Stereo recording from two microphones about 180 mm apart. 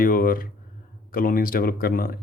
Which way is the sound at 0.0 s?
50° left (ahead or behind).